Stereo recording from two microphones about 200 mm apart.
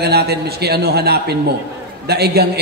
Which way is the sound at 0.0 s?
55° right (ahead or behind).